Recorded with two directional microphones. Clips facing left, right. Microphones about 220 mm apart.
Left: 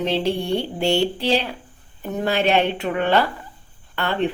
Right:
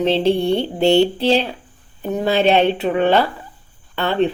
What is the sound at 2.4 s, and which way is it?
A woman's voice, 20° right (ahead or behind).